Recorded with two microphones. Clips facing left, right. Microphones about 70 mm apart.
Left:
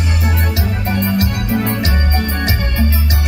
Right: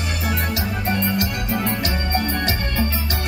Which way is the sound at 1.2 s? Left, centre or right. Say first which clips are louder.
Left 5 dB; left.